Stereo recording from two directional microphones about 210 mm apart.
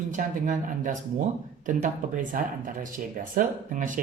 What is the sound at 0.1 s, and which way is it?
Speech, 40° right (ahead or behind).